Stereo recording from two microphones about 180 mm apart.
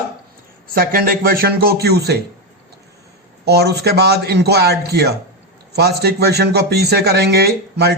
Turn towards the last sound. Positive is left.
turn(degrees=-65)  # may be behind; listen again after turning